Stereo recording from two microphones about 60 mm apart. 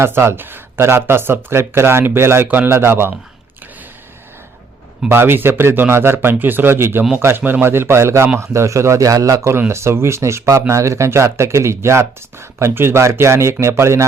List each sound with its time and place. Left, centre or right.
0.0 s speech: right
5.0 s a man's voice: right
9.6 s speech: right